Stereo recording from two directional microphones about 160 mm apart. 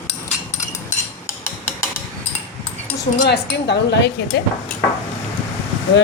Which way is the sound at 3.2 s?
90° left.